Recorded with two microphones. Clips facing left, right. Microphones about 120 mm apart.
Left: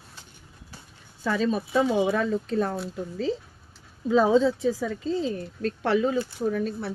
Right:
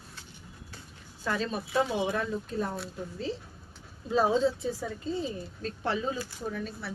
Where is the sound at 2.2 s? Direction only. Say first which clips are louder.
Left 7 dB; 90° left.